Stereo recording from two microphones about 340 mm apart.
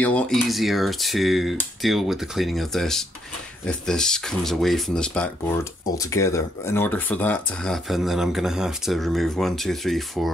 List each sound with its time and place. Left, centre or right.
0.0 s speech: centre